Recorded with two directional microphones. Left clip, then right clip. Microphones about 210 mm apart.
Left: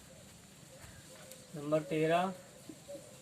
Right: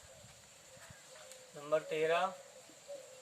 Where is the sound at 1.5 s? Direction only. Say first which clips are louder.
Left 1 dB; centre (ahead or behind).